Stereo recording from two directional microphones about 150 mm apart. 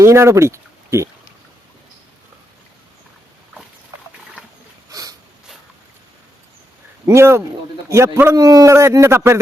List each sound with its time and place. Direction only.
0.0 s speech: 20° right (ahead or behind)
4.9 s a sound: 25° right (ahead or behind)
7.0 s a man's voice: 20° right (ahead or behind)